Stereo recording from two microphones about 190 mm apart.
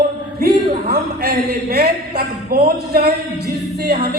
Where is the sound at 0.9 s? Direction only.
55° right (ahead or behind).